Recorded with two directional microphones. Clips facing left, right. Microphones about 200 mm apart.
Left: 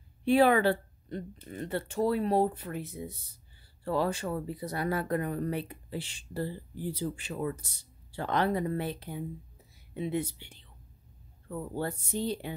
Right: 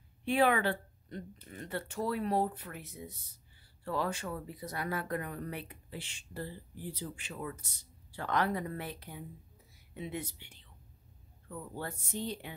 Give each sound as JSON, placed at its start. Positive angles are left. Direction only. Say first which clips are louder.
{"t": 0.2, "sound": "speech", "louder": "left 6 dB", "side_deg": 35}